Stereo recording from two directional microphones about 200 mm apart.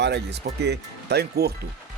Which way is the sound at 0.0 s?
60° right (ahead or behind).